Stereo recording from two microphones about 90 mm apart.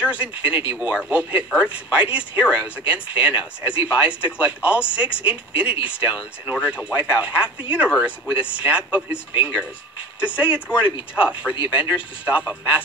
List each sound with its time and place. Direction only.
0.0 s speech: 15° right (ahead or behind)